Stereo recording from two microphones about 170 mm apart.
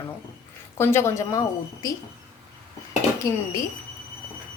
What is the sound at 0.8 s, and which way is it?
Speech, 15° left (ahead or behind).